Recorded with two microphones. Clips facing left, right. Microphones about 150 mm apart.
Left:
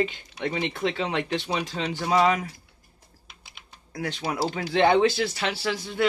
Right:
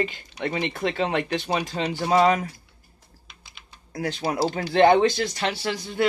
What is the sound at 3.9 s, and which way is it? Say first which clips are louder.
Speech: right 3 dB; 40° right (ahead or behind).